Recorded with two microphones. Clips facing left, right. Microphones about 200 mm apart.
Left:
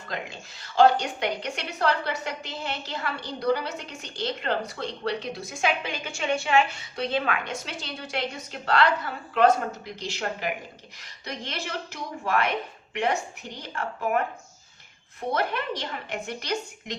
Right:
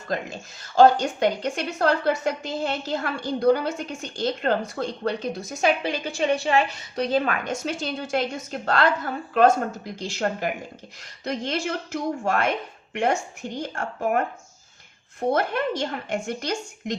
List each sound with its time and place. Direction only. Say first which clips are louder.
0.8 s a woman's voice: right 3 dB; 45° right (ahead or behind)
15.3 s a woman's voice: right 4 dB; 50° right (ahead or behind)